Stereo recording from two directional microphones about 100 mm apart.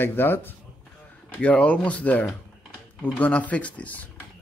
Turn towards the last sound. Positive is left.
turn(degrees=15)  # may be behind; listen again after turning